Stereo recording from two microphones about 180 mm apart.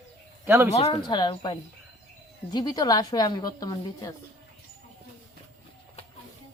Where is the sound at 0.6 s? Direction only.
35° left (ahead or behind); by 4.1 s 20° left (ahead or behind).